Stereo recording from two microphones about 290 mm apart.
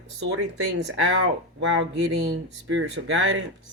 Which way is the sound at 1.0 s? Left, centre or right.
Right.